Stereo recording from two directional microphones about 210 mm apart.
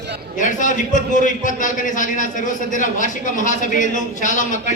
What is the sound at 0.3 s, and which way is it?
A man's voice, 35° left (ahead or behind).